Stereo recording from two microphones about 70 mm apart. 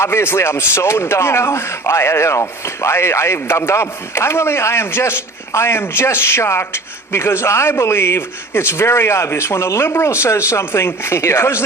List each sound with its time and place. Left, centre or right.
0.0 s speech: left